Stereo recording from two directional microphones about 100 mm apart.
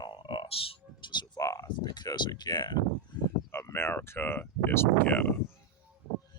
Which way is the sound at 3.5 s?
25° left (ahead or behind).